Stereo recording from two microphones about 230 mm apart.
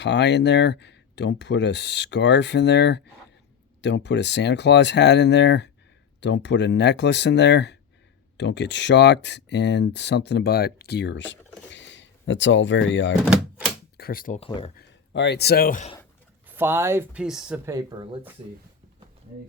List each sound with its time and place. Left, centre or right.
0.0 s speech: left
13.9 s a sound: left
14.3 s speech: left
14.8 s speech: left
16.5 s speech: centre
17.7 s speech: centre